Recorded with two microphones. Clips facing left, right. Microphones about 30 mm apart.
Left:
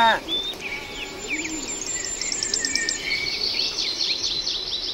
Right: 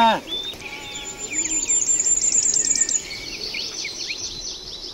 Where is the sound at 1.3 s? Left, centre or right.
Left.